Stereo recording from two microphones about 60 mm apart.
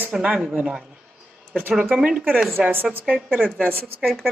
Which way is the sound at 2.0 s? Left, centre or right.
Centre.